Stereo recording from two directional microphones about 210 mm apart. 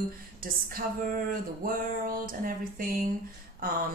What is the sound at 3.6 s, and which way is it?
Speech, 45° right (ahead or behind).